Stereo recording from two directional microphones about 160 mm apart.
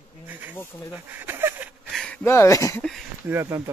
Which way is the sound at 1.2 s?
15° right (ahead or behind).